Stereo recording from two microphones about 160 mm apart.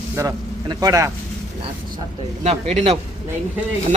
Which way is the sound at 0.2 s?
20° right (ahead or behind).